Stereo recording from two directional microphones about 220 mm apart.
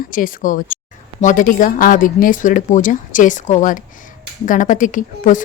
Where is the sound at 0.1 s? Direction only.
40° left (ahead or behind).